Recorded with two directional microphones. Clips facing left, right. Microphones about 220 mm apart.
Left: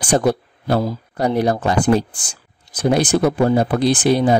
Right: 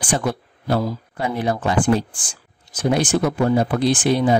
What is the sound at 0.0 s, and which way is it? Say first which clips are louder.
Speech: left 6 dB; 40° left (ahead or behind).